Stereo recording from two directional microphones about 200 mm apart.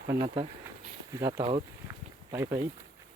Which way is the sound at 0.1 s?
20° right (ahead or behind).